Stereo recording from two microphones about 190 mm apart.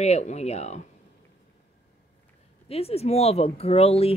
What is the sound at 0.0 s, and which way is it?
Speech, 35° left (ahead or behind).